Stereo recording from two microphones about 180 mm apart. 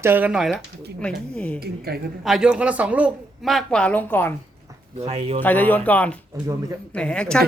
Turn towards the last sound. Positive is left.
turn(degrees=5)  # may be behind; listen again after turning